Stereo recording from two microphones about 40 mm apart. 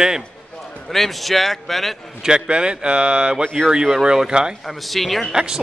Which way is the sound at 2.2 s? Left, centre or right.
Right.